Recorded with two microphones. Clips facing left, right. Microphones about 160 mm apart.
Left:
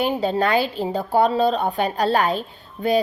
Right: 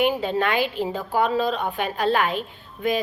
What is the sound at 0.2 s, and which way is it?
A woman's voice, 35° left (ahead or behind).